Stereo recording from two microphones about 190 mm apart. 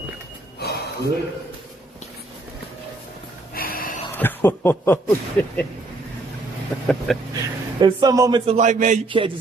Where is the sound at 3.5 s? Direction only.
50° left (ahead or behind).